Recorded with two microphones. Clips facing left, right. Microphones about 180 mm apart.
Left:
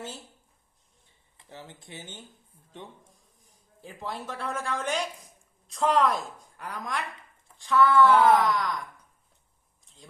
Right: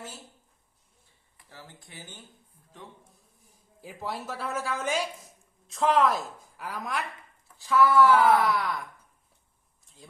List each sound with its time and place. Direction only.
1.4 s speech: 20° left (ahead or behind)
3.8 s a woman's voice: 5° right (ahead or behind)